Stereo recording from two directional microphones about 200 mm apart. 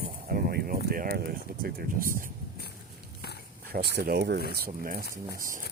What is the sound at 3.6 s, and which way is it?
Speech, 50° right (ahead or behind).